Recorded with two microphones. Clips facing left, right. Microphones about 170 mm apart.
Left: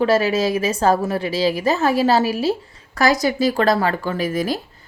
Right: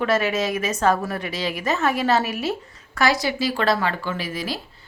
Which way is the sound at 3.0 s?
40° left (ahead or behind).